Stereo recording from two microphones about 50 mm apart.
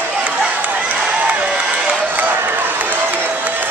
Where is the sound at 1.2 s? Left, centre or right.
Right.